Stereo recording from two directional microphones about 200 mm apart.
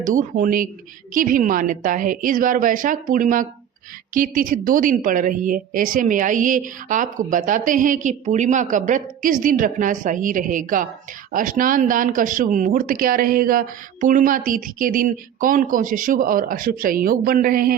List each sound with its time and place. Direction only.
0.0 s a woman's voice: 40° right (ahead or behind)